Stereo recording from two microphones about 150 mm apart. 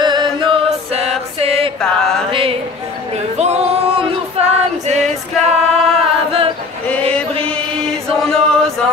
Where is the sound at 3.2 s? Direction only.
45° right (ahead or behind).